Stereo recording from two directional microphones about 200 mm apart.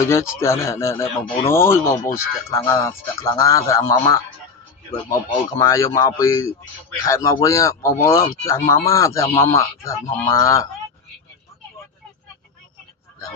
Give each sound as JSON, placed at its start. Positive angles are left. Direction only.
{"t": 0.0, "sound": "speech", "side_deg": 15}
{"t": 5.5, "sound": "speech", "side_deg": 15}